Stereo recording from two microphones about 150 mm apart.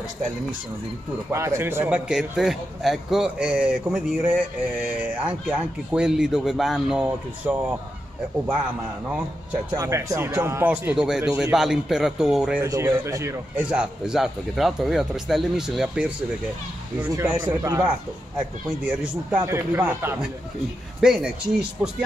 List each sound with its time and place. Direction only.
1.3 s a man's voice: 20° right (ahead or behind)
9.7 s a man's voice: 20° right (ahead or behind); by 12.6 s 5° right (ahead or behind)
12.6 s speech: 20° right (ahead or behind)
17.1 s a man's voice: 20° right (ahead or behind)
19.4 s a man's voice: 15° right (ahead or behind)
21.0 s speech: 5° right (ahead or behind)